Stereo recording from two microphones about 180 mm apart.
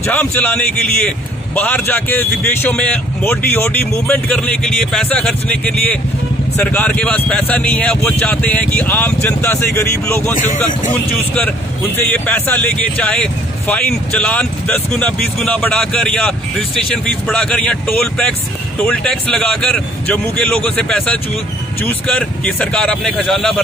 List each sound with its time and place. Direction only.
0.0 s a man's voice: 10° left (ahead or behind)
10.3 s speech: 45° left (ahead or behind)
12.1 s a man's voice: 10° left (ahead or behind)